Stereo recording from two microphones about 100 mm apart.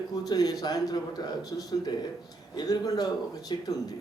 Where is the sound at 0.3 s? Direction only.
40° left (ahead or behind).